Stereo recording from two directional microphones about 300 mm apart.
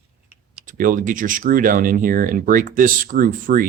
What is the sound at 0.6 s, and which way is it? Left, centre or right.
Speech, right.